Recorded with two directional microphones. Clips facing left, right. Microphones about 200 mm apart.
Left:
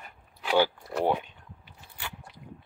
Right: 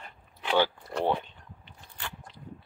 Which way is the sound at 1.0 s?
10° left (ahead or behind).